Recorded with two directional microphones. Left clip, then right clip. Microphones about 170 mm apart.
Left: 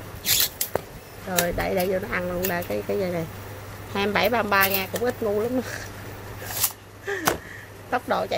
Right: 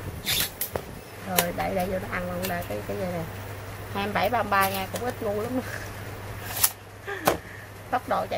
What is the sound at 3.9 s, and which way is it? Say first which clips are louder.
Speech: left 3 dB; 45° left (ahead or behind).